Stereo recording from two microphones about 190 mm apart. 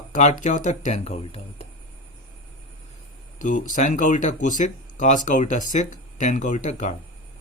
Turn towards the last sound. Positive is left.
turn(degrees=40)  # may be behind; listen again after turning